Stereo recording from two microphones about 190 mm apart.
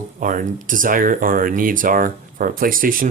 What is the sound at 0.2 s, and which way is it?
Speech, 45° right (ahead or behind).